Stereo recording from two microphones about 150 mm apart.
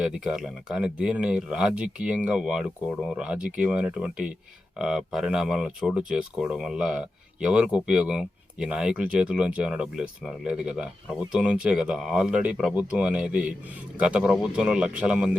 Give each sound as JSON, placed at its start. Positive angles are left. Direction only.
{"t": 0.0, "sound": "speech", "side_deg": -5}